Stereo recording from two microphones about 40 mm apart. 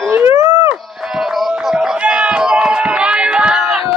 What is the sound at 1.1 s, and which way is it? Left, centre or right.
Music, centre.